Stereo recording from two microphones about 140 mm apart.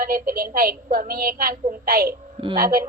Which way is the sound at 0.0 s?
85° right.